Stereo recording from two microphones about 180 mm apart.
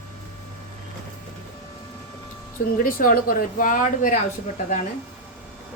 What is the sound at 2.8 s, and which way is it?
Speech, 50° left (ahead or behind).